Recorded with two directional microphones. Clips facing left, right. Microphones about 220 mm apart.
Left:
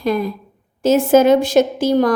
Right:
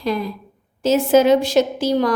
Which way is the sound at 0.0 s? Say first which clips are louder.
Left 4 dB; 50° left (ahead or behind).